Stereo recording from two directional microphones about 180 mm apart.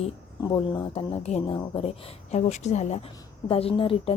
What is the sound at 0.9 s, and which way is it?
Speech, 30° left (ahead or behind).